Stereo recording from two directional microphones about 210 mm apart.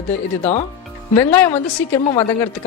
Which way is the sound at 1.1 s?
10° left (ahead or behind).